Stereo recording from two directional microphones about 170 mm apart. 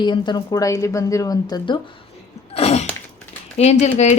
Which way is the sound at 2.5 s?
35° left (ahead or behind).